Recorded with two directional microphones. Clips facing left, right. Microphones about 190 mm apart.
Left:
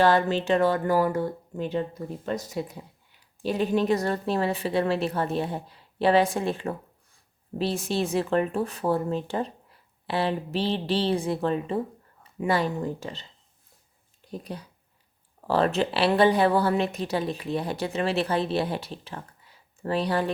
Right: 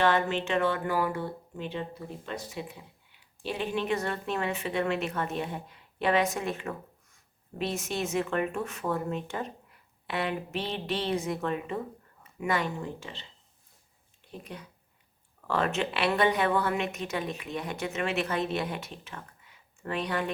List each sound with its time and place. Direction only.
0.0 s speech: 35° left (ahead or behind)
14.3 s speech: 35° left (ahead or behind)